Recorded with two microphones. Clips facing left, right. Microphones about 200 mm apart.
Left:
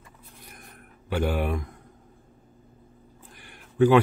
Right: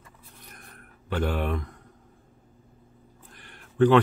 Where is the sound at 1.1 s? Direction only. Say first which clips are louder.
Left 1 dB; 10° left (ahead or behind).